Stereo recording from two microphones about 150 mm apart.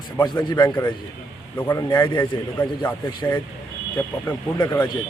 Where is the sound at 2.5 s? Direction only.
15° left (ahead or behind).